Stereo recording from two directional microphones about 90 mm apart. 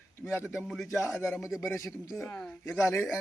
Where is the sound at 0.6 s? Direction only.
5° left (ahead or behind).